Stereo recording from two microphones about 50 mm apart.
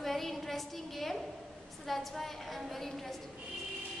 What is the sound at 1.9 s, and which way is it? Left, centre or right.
A woman's voice, centre.